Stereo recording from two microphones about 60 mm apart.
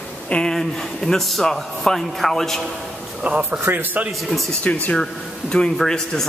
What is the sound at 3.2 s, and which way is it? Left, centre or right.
Speech, right.